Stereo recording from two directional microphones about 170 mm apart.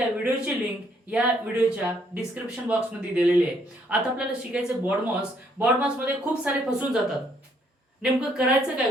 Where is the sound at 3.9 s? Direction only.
5° right (ahead or behind).